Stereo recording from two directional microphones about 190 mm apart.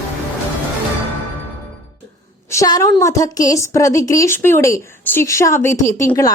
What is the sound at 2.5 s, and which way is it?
A woman's voice, 20° left (ahead or behind).